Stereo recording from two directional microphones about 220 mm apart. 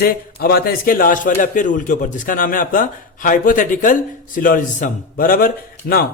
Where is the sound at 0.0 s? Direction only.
45° left (ahead or behind).